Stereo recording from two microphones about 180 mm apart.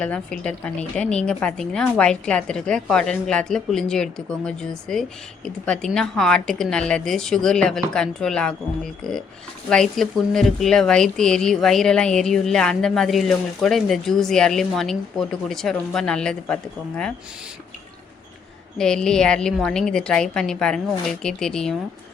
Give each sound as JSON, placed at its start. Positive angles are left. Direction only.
{"t": 0.0, "sound": "speech", "side_deg": 5}
{"t": 18.8, "sound": "speech", "side_deg": 5}